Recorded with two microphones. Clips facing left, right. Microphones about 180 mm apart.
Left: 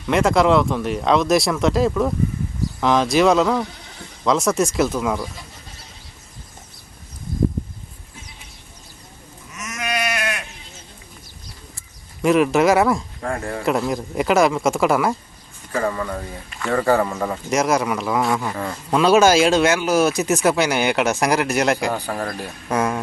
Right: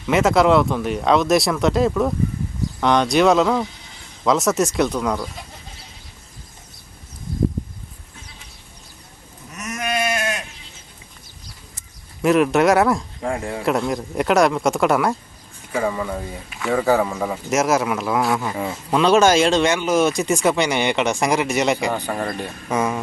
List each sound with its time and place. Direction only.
0.1 s speech: centre (ahead or behind)
9.6 s goat: 35° right (ahead or behind)
12.2 s speech: centre (ahead or behind)
13.2 s speech: 15° right (ahead or behind)
13.6 s speech: centre (ahead or behind)